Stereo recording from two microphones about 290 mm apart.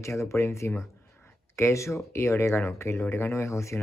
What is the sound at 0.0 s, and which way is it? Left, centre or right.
Speech, centre.